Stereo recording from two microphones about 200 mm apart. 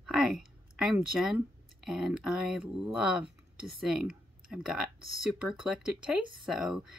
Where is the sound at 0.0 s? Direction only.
5° right (ahead or behind).